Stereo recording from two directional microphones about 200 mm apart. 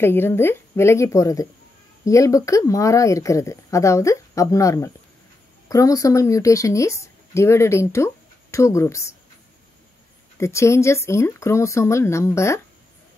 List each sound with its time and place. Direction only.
0.0 s speech: 10° left (ahead or behind)
10.3 s speech: 15° left (ahead or behind)